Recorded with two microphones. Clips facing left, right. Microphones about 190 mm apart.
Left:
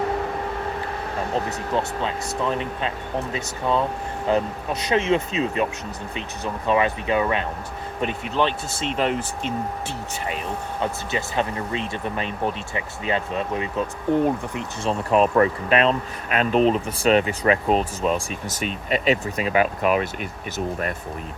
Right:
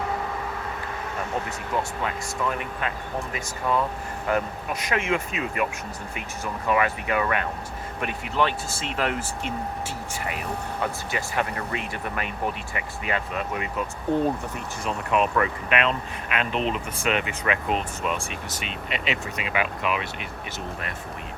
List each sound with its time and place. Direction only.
1.3 s speech: 30° left (ahead or behind)
4.3 s speech: 25° left (ahead or behind)
11.1 s speech: 25° left (ahead or behind)
14.1 s speech: 15° left (ahead or behind)
14.8 s speech: 35° left (ahead or behind)